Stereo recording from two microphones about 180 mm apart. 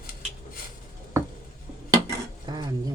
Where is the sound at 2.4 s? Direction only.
25° right (ahead or behind).